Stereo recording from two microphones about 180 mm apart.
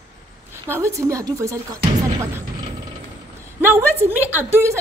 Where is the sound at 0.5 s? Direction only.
15° right (ahead or behind).